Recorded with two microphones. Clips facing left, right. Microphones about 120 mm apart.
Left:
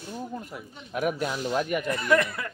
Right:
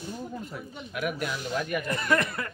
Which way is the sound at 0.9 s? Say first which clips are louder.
Left 4 dB; 30° left (ahead or behind).